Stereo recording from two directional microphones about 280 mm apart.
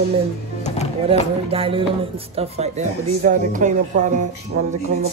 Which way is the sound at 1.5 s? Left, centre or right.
Centre.